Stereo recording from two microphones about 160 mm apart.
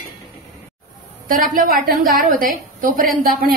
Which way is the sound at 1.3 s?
60° right (ahead or behind).